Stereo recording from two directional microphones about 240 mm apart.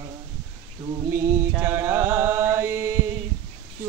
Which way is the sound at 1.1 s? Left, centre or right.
Centre.